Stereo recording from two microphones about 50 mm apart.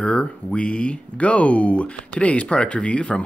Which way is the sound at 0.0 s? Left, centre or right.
Centre.